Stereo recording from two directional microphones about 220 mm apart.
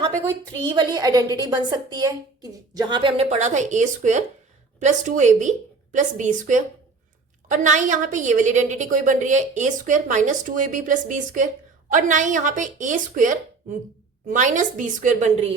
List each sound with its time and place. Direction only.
0.7 s a woman's voice: 20° right (ahead or behind); by 15.5 s 35° right (ahead or behind)